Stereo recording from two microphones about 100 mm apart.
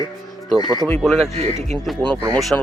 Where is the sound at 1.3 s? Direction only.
90° right.